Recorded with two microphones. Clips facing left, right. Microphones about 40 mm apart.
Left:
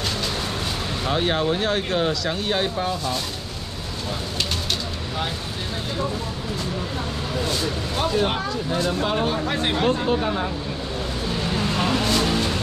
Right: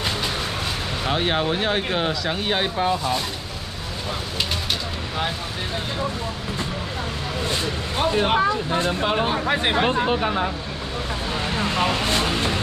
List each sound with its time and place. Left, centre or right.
1.0 s speech: centre
7.4 s speech: right
11.3 s vehicle: right